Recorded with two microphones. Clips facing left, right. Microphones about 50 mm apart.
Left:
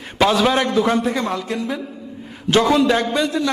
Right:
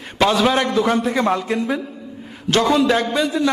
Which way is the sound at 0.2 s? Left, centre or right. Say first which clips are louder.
Even; centre.